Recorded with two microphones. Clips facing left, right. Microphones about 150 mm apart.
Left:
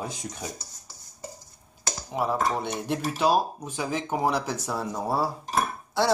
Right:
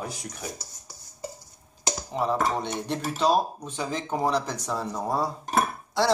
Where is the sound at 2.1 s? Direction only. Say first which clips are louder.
Even; 5° left (ahead or behind).